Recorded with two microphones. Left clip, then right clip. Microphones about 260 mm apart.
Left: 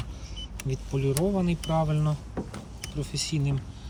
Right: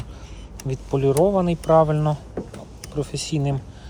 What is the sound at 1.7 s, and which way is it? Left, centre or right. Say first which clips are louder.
Speech: right 12 dB; right.